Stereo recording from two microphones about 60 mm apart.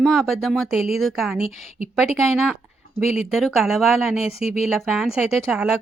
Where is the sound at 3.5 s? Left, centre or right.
Centre.